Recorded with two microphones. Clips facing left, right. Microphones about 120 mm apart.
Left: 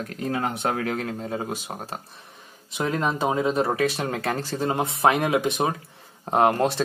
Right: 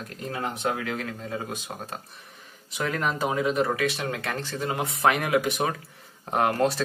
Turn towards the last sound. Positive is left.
turn(degrees=25)  # may be behind; listen again after turning